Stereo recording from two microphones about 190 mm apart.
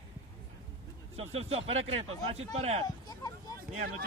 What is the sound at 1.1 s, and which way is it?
Speech, 35° right (ahead or behind).